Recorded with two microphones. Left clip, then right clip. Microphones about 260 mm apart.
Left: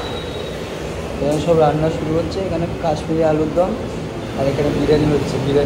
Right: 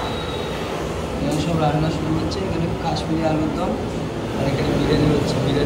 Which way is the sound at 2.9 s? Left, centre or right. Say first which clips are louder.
Left 6 dB; centre.